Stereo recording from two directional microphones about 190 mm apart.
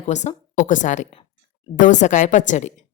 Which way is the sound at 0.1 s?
40° left (ahead or behind).